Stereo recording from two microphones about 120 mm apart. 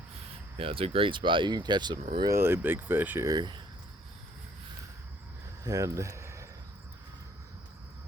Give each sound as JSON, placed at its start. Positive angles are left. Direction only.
{"t": 0.5, "sound": "speech", "side_deg": -50}
{"t": 2.2, "sound": "speech", "side_deg": -20}
{"t": 3.2, "sound": "speech", "side_deg": -35}
{"t": 5.6, "sound": "a sound", "side_deg": -25}